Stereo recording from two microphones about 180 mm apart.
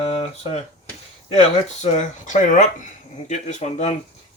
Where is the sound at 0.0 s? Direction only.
35° left (ahead or behind).